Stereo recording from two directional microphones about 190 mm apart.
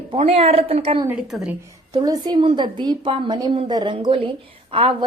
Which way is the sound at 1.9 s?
20° right (ahead or behind).